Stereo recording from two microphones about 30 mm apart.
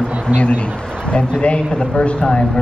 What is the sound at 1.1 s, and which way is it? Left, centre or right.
Speech, left.